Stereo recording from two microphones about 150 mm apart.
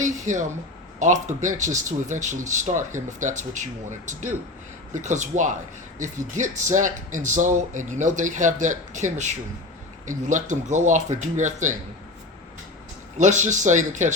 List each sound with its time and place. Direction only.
0.0 s a sound: 55° right (ahead or behind)
0.9 s speech: 55° right (ahead or behind)
13.1 s speech: 55° right (ahead or behind)